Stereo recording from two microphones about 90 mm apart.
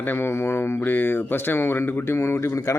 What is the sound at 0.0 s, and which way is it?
A man's voice, 25° left (ahead or behind).